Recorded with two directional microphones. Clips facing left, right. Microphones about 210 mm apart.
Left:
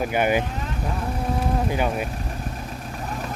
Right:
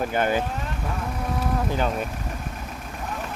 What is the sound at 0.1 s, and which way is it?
Speech, 15° left (ahead or behind).